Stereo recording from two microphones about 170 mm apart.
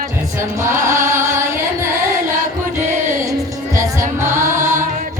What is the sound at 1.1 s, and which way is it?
Music, 15° right (ahead or behind).